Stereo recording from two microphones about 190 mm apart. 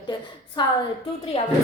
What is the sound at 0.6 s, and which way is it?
Speech, 25° left (ahead or behind).